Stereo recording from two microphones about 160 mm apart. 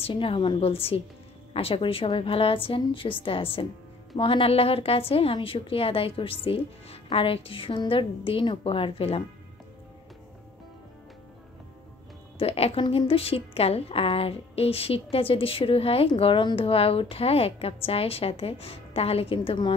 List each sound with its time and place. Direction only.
0.0 s a woman's voice: 35° left (ahead or behind)
12.4 s a woman's voice: 40° left (ahead or behind)